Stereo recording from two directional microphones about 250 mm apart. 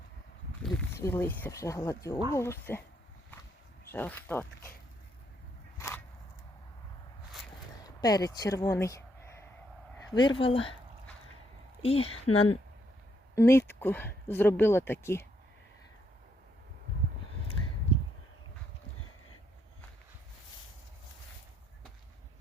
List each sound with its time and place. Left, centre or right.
0.6 s speech: centre
3.9 s speech: centre
5.7 s a sound: centre
7.9 s speech: centre
11.8 s speech: left
13.3 s speech: centre